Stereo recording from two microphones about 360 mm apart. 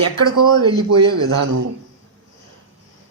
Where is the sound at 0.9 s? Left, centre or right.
Right.